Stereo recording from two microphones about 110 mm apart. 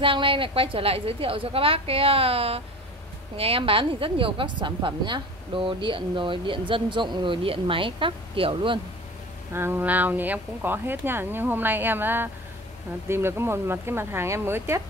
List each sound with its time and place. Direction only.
0.0 s a woman's voice: 50° right (ahead or behind)
9.5 s speech: 20° right (ahead or behind)